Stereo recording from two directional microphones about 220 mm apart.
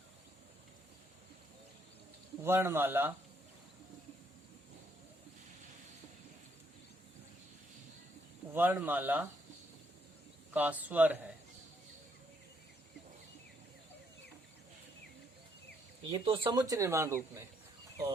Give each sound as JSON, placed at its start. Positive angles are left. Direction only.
{"t": 2.4, "sound": "speech", "side_deg": -10}
{"t": 8.5, "sound": "speech", "side_deg": -10}
{"t": 10.5, "sound": "speech", "side_deg": -5}
{"t": 16.0, "sound": "speech", "side_deg": -25}
{"t": 16.6, "sound": "speech", "side_deg": -15}